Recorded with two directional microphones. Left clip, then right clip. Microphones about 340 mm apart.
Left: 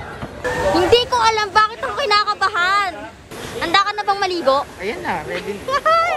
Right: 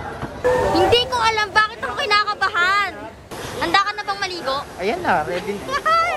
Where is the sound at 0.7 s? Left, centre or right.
Centre.